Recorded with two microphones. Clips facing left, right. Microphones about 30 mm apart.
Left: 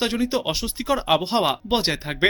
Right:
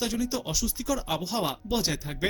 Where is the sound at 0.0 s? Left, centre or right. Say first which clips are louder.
Left 7 dB; left.